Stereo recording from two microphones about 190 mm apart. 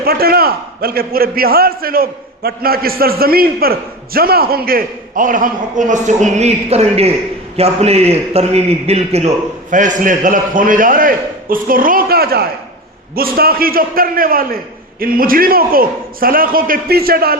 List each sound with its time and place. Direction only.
0.0 s a man's voice: 55° right (ahead or behind)